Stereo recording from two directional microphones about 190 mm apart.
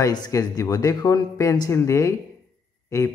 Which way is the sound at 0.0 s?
20° left (ahead or behind).